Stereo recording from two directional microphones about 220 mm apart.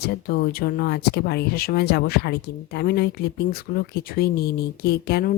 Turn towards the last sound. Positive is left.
turn(degrees=45)  # may be behind; listen again after turning